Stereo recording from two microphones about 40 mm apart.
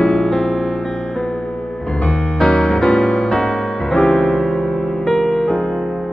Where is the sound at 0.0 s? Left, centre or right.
Centre.